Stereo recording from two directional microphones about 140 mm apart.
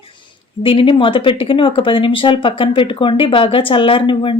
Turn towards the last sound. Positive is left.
turn(degrees=40)  # may be behind; listen again after turning